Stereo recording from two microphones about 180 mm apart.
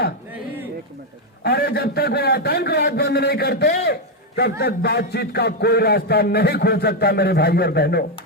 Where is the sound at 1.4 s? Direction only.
65° left (ahead or behind).